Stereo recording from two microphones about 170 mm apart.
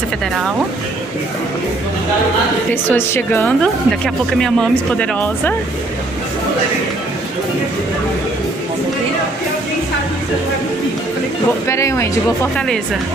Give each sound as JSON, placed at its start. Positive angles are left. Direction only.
{"t": 2.7, "sound": "speech", "side_deg": 15}
{"t": 11.6, "sound": "speech", "side_deg": 15}